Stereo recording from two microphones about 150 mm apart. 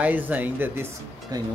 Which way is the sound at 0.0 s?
10° right (ahead or behind).